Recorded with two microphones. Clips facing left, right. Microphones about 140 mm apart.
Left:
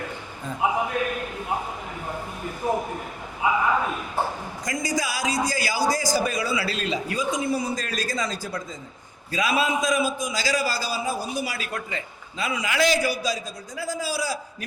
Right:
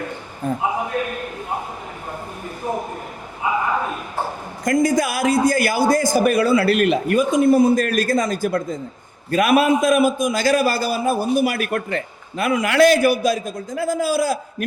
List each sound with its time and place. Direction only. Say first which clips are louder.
0.4 s a man's voice: right 11 dB; 60° right (ahead or behind)
4.6 s a man's voice: right 10 dB; 55° right (ahead or behind)